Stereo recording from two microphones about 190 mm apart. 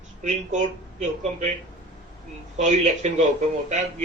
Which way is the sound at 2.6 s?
40° right (ahead or behind).